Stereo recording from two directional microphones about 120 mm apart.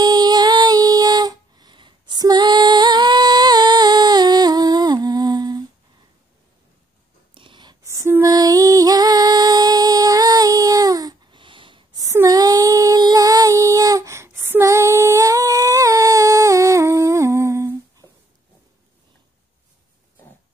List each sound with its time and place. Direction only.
0.0 s music: 35° right (ahead or behind)
7.3 s whispering: 40° right (ahead or behind)
7.8 s female singing: 25° right (ahead or behind); by 12.0 s 45° right (ahead or behind)
12.0 s child singing: 25° right (ahead or behind)